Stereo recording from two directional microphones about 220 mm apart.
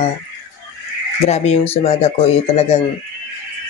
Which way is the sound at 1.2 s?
30° left (ahead or behind).